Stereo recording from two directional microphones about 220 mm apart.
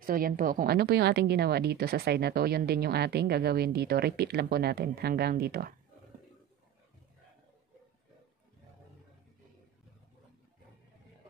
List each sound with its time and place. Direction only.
0.0 s a woman's voice: 40° right (ahead or behind)